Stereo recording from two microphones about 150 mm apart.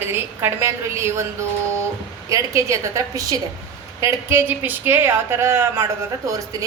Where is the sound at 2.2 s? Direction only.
20° right (ahead or behind).